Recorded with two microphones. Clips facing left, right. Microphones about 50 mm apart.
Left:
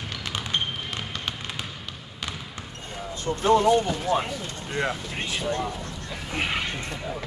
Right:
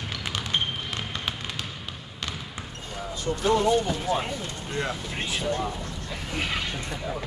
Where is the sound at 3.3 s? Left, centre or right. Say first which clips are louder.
Left 3 dB; left.